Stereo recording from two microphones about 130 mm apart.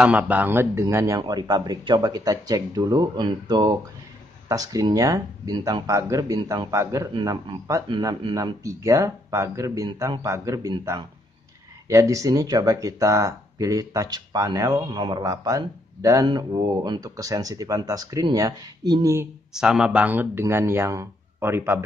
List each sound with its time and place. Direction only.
0.0 s speech: 10° right (ahead or behind); by 8.5 s 35° right (ahead or behind)
8.6 s speech: 25° right (ahead or behind)
19.5 s speech: 5° right (ahead or behind)